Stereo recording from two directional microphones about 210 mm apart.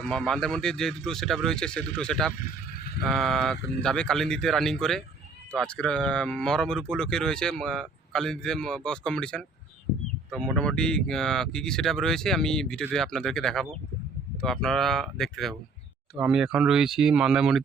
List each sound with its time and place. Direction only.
0.0 s speech: centre (ahead or behind)
2.4 s a sound: 45° left (ahead or behind)
3.0 s speech: centre (ahead or behind)